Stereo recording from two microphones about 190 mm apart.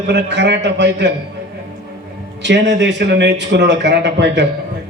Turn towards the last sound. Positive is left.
turn(degrees=-65)  # may be behind; listen again after turning